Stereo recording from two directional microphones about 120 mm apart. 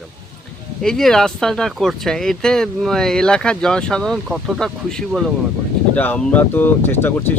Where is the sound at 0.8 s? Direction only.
5° left (ahead or behind).